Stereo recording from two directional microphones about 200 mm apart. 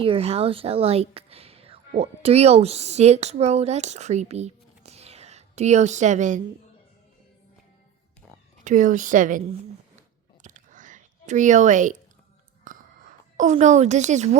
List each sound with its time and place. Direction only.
0.0 s speech: 30° right (ahead or behind)
8.6 s speech: 40° right (ahead or behind)
10.4 s whispering: 40° right (ahead or behind)
12.6 s a sound: 40° right (ahead or behind)